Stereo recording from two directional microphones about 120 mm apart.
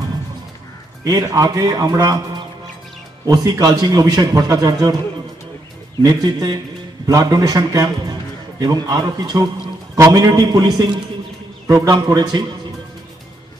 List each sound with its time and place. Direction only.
1.0 s a man's voice: 30° right (ahead or behind)
6.0 s a man's voice: 35° right (ahead or behind)